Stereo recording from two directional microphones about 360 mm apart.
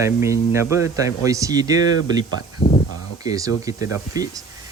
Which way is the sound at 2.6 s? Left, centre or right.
Centre.